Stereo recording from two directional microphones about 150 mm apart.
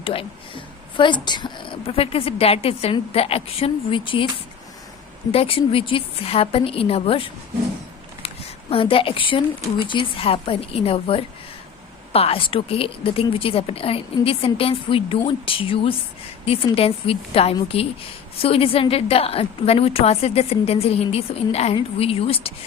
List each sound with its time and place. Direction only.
0.0 s speech: 35° left (ahead or behind)
5.3 s speech: 40° left (ahead or behind)
8.7 s speech: 35° left (ahead or behind)